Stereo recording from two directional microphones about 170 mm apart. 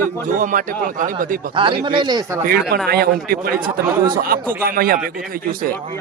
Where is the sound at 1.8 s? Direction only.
25° right (ahead or behind).